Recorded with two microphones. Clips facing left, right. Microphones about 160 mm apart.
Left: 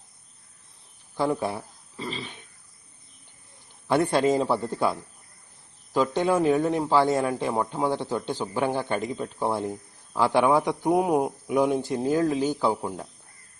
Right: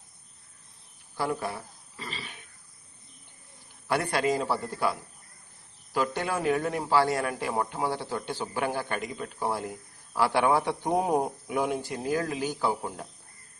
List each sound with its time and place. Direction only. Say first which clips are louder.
1.1 s a man's voice: left 5 dB; 20° left (ahead or behind)
3.8 s a man's voice: left 5 dB; 25° left (ahead or behind)